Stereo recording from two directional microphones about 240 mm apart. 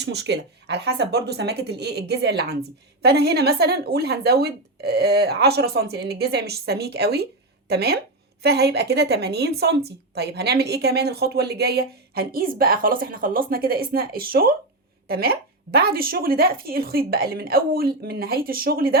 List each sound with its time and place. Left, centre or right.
0.0 s a woman's voice: right